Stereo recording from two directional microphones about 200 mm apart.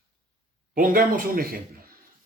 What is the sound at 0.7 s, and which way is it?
Speech, 45° right (ahead or behind).